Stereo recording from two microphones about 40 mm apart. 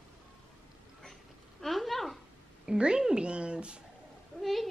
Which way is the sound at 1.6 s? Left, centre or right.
Centre.